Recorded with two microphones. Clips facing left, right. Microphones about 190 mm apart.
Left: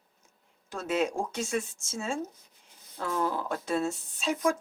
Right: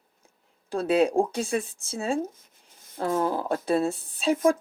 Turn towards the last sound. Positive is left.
turn(degrees=-35)  # may be behind; listen again after turning